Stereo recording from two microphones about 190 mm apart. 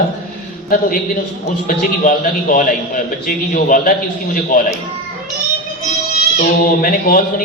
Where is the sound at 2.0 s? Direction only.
45° left (ahead or behind).